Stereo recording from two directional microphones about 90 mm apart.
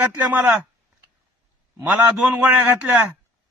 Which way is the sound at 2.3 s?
20° right (ahead or behind).